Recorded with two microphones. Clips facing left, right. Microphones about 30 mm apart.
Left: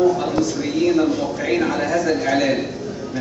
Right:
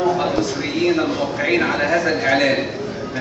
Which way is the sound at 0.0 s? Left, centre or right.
Right.